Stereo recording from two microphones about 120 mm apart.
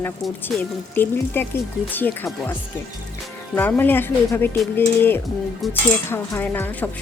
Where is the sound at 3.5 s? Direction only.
15° left (ahead or behind).